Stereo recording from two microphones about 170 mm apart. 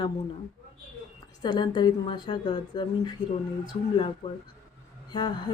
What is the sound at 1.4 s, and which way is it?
Speech, 25° left (ahead or behind).